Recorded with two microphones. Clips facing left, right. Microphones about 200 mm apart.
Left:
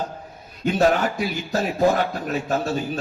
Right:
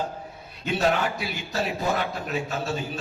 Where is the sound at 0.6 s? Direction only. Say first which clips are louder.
Left 5 dB; 45° left (ahead or behind).